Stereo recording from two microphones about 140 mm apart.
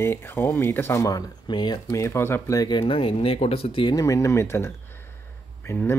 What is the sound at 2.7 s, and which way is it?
Speech, 40° left (ahead or behind).